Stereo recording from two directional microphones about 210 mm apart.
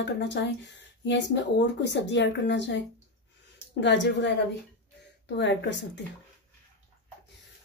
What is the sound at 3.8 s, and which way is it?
A woman's voice, 60° left (ahead or behind).